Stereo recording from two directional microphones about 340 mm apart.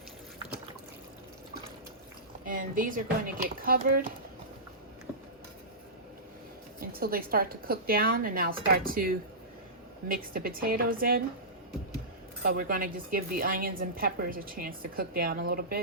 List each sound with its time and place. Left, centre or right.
2.5 s speech: right
6.7 s speech: right
12.4 s speech: right